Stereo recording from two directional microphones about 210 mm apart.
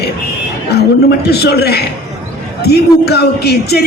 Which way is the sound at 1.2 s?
50° left (ahead or behind).